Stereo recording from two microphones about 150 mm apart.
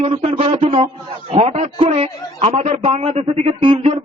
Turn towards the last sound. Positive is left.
turn(degrees=-35)  # may be behind; listen again after turning